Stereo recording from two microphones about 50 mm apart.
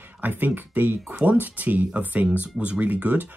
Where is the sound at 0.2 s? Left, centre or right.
Right.